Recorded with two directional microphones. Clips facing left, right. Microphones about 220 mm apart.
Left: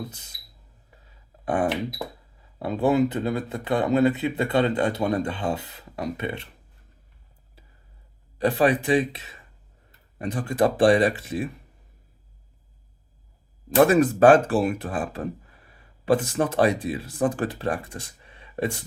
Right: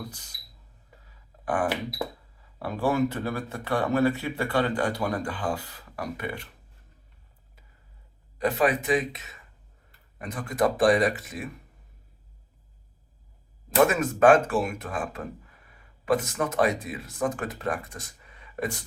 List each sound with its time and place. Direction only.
1.5 s speech: 25° left (ahead or behind)
8.4 s speech: 30° left (ahead or behind)
13.7 s speech: 35° left (ahead or behind)